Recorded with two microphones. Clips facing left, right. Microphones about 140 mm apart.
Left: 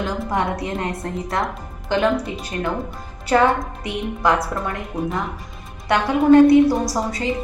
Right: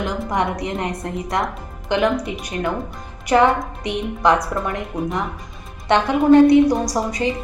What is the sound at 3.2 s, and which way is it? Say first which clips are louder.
A woman's voice: right 1 dB; 20° right (ahead or behind).